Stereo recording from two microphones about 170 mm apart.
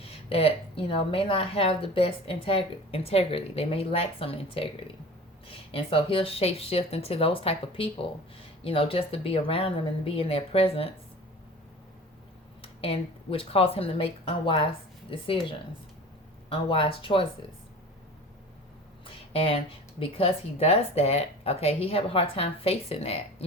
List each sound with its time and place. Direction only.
0.0 s speech: 35° left (ahead or behind)
12.6 s speech: 35° left (ahead or behind)
19.0 s speech: 35° left (ahead or behind)